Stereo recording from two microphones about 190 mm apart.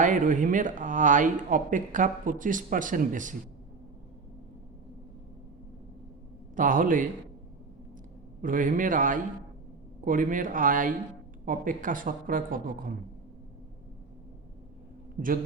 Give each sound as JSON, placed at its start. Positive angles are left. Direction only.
{"t": 0.0, "sound": "speech", "side_deg": -40}
{"t": 6.6, "sound": "speech", "side_deg": -45}
{"t": 8.4, "sound": "speech", "side_deg": -45}
{"t": 15.2, "sound": "speech", "side_deg": -50}